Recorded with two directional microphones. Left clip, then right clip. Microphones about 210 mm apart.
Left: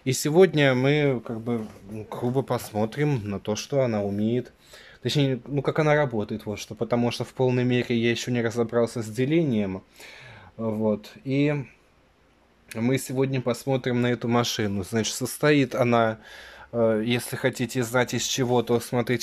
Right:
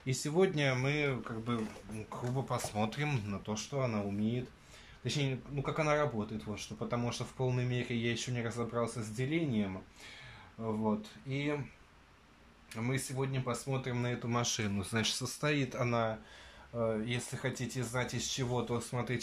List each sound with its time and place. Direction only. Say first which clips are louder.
0.0 s speech: left 12 dB; 50° left (ahead or behind)
12.7 s speech: left 12 dB; 45° left (ahead or behind)